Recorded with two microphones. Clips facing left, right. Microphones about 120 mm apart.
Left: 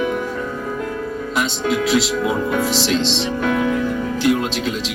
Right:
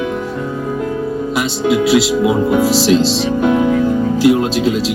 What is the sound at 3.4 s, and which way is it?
Music, 25° right (ahead or behind).